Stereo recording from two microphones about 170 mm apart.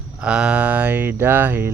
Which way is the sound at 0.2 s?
5° right (ahead or behind).